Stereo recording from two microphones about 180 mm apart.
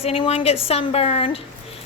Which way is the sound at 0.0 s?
30° left (ahead or behind).